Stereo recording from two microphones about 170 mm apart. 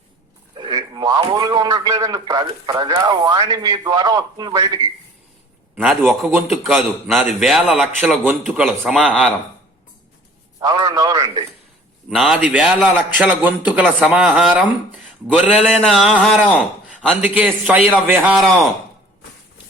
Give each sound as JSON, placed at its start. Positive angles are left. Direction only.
{"t": 0.5, "sound": "a man's voice", "side_deg": -25}
{"t": 5.7, "sound": "a man's voice", "side_deg": -5}
{"t": 10.6, "sound": "a man's voice", "side_deg": -25}
{"t": 12.1, "sound": "a man's voice", "side_deg": -5}